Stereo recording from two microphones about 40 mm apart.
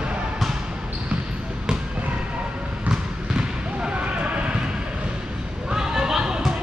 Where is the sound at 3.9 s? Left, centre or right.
Right.